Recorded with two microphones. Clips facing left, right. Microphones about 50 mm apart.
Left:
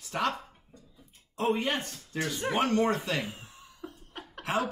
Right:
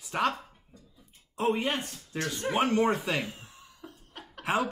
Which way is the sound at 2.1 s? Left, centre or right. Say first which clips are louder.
Even; centre.